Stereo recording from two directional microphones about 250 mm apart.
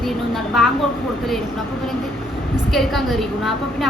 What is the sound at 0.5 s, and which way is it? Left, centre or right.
Speech, centre.